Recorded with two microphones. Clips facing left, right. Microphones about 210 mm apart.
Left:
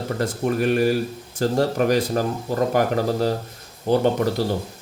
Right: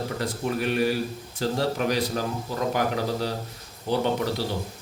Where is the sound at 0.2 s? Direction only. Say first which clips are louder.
Left 7 dB; 50° left (ahead or behind).